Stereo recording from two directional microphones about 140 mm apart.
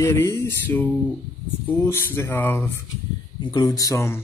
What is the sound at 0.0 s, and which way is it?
Speech, 20° left (ahead or behind).